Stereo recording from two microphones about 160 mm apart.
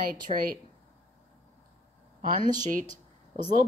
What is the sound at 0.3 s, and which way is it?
Speech, 45° right (ahead or behind).